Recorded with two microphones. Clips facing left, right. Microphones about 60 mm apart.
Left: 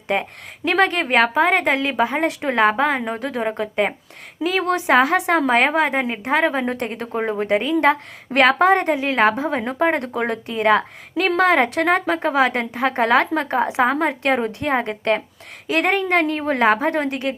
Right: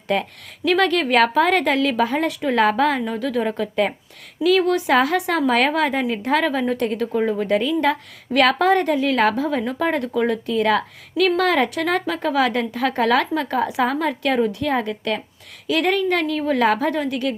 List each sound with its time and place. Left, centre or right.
0.1 s a woman's voice: left
3.0 s a woman's voice: left